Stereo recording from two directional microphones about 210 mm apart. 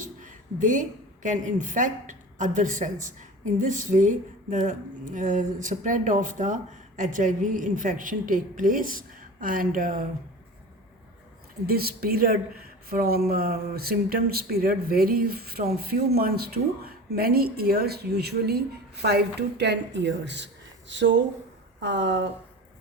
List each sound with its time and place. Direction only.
0.0 s a woman's voice: 40° right (ahead or behind)
11.6 s a woman's voice: 45° right (ahead or behind)